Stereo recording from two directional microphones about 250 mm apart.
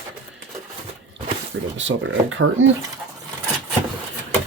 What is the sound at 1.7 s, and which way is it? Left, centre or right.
Speech, right.